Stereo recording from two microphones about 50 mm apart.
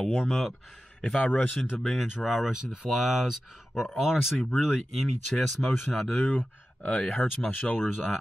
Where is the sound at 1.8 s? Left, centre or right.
Centre.